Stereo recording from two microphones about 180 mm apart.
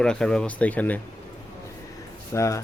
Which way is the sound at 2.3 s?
15° left (ahead or behind).